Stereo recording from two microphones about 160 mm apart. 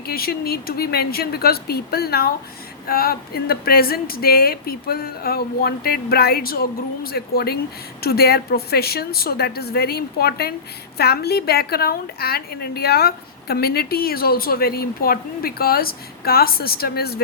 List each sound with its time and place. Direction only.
0.1 s a woman's voice: 70° left (ahead or behind)